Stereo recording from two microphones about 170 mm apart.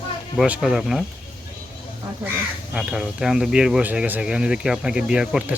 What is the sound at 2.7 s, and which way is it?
Speech, 5° right (ahead or behind).